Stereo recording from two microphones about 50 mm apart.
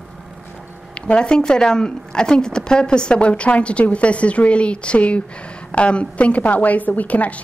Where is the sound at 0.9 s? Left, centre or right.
Centre.